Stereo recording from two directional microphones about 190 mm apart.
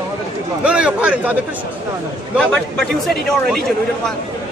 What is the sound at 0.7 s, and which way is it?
Speech, 5° right (ahead or behind).